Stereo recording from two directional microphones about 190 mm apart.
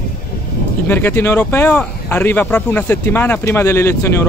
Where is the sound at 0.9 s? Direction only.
10° left (ahead or behind).